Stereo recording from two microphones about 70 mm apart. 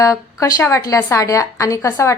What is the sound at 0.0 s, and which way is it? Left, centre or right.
A woman's voice, left.